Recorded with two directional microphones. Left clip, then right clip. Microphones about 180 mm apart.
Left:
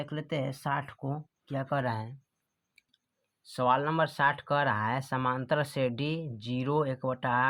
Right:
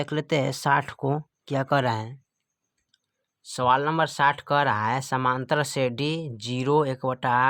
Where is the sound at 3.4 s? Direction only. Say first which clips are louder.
Right 5 dB; 30° right (ahead or behind).